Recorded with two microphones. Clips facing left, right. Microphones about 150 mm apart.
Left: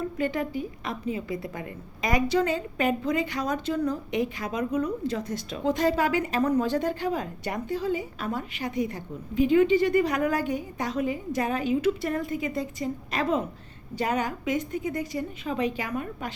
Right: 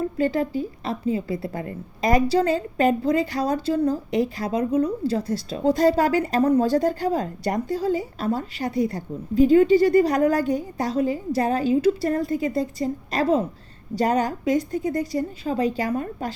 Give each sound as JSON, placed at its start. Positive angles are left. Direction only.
{"t": 0.2, "sound": "a woman's voice", "side_deg": -30}